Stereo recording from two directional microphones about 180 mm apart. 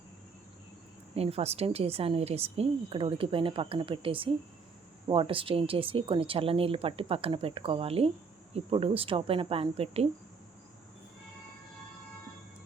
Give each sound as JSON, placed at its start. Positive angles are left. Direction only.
{"t": 1.1, "sound": "a woman's voice", "side_deg": -35}